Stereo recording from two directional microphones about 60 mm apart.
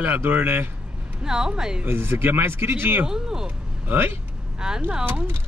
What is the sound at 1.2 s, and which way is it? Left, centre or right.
Speech, centre.